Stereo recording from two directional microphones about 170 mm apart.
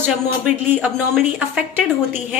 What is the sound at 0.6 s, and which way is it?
A woman's voice, 10° right (ahead or behind).